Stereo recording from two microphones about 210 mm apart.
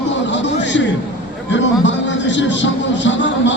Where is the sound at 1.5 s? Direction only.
60° left (ahead or behind).